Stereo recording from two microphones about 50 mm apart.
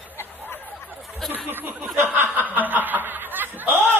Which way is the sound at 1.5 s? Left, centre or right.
Right.